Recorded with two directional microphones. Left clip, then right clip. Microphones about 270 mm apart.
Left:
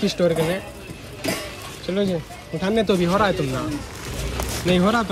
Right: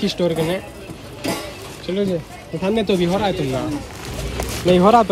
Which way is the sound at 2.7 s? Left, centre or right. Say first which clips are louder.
Left 1 dB; centre.